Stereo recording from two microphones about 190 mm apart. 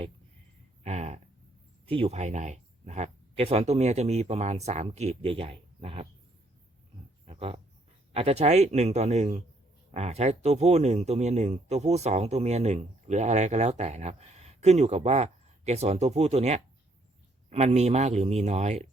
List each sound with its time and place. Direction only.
0.9 s speech: 35° right (ahead or behind)
7.3 s pig: 30° right (ahead or behind)
8.1 s speech: 35° right (ahead or behind)